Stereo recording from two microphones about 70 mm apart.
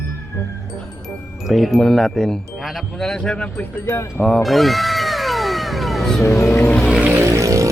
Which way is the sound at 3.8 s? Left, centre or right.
Left.